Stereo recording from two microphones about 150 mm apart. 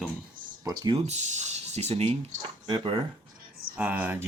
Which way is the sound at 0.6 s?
30° right (ahead or behind).